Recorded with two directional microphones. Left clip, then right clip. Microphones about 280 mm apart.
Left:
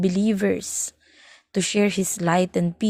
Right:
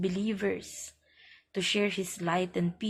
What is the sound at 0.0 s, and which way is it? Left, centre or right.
Speech, left.